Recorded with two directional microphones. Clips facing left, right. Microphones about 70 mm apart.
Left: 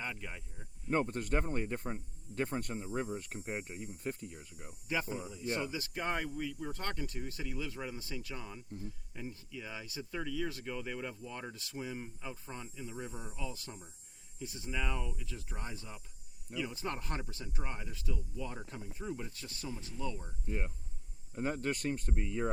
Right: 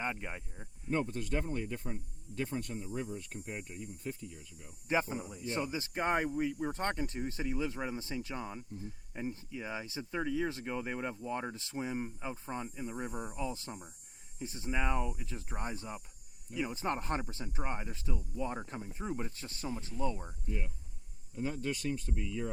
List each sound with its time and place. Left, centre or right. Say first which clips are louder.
0.0 s speech: right 4 dB; right
0.9 s speech: left 1 dB; left
4.9 s speech: right 4 dB; right
12.8 s speech: right 4 dB; right
13.4 s speech: right 3 dB; right
20.5 s speech: left 2 dB; left